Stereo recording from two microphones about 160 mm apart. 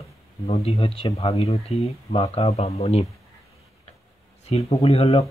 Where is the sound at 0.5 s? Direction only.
40° left (ahead or behind).